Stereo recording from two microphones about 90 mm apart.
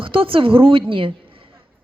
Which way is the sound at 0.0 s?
80° right.